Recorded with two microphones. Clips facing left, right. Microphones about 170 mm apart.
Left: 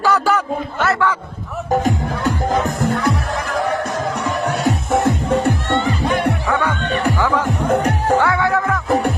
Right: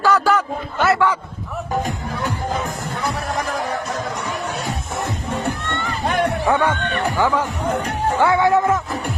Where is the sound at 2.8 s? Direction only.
70° left (ahead or behind).